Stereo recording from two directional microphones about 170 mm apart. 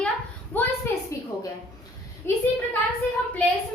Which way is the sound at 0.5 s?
10° left (ahead or behind).